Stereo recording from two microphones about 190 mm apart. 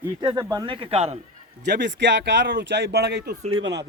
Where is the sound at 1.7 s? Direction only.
65° right (ahead or behind).